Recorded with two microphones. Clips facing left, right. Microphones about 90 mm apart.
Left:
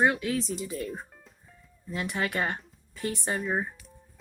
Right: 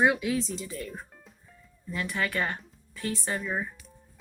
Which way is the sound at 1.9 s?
25° left (ahead or behind).